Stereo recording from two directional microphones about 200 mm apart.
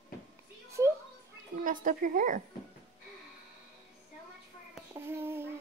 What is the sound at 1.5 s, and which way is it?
Speech, 40° right (ahead or behind).